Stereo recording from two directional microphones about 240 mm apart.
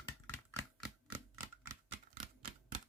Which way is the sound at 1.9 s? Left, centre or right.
Right.